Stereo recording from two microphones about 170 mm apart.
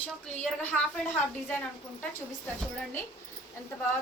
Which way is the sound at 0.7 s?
5° right (ahead or behind).